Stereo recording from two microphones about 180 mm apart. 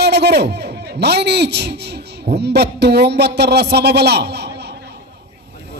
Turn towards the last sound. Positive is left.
turn(degrees=-65)  # may be behind; listen again after turning